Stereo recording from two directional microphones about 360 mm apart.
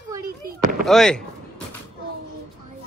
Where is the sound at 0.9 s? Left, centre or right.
Centre.